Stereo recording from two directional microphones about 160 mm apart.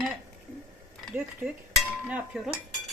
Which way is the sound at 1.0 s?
5° right (ahead or behind).